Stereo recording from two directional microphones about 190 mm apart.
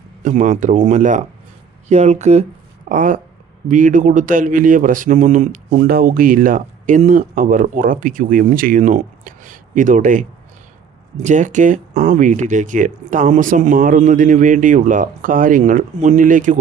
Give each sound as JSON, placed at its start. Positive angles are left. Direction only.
{"t": 0.2, "sound": "speech", "side_deg": -40}